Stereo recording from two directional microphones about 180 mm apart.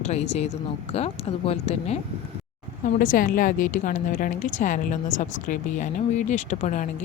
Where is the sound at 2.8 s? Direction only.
50° left (ahead or behind).